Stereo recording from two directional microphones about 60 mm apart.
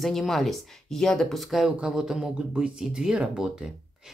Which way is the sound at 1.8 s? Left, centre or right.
Centre.